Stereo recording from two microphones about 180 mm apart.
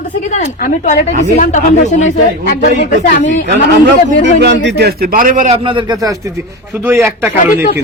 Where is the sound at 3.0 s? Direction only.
80° left.